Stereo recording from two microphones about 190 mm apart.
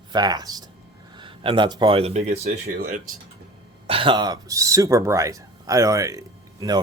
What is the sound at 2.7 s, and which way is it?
Speech, 50° right (ahead or behind).